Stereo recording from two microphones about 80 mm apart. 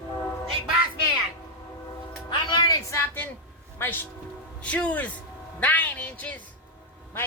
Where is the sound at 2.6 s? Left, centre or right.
Left.